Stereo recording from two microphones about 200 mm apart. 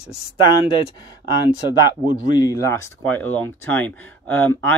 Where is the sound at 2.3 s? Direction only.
20° left (ahead or behind).